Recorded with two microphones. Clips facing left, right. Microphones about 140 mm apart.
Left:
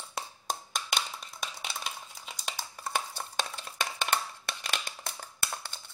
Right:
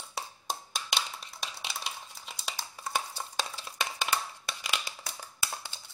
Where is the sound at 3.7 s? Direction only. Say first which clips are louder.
Even; 10° right (ahead or behind).